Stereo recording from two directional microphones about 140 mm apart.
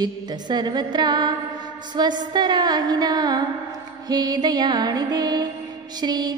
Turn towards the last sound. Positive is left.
turn(degrees=-30)  # may be behind; listen again after turning